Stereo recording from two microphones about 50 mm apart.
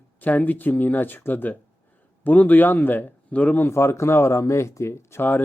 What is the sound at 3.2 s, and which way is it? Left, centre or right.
Speech, left.